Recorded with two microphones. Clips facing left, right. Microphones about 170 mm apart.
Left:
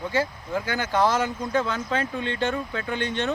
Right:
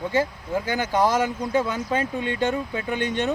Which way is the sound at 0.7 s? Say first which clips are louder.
Right 1 dB; 15° right (ahead or behind).